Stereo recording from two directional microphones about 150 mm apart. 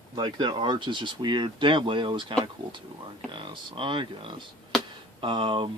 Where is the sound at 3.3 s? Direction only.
35° right (ahead or behind).